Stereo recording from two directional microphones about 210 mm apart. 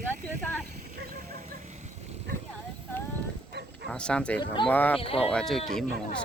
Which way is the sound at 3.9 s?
5° left (ahead or behind).